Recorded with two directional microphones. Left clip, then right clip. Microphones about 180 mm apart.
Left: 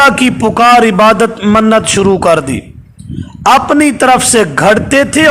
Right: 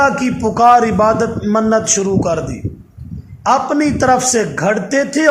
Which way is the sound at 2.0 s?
30° left (ahead or behind).